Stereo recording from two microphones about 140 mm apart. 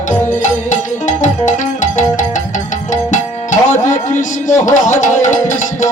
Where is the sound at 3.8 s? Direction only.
65° left (ahead or behind).